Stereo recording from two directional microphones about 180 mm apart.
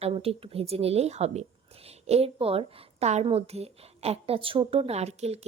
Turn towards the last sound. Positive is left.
turn(degrees=-35)  # may be behind; listen again after turning